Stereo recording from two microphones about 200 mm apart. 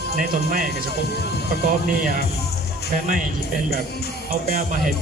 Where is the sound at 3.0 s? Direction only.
40° right (ahead or behind).